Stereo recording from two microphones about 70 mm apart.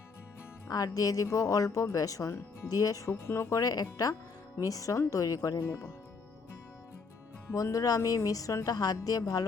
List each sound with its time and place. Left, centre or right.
0.7 s speech: left
3.1 s speech: left
3.6 s speech: left
3.8 s speech: left
7.5 s speech: left